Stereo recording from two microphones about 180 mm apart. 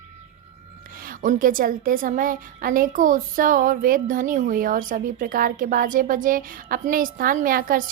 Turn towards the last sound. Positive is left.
turn(degrees=-50)  # may be behind; listen again after turning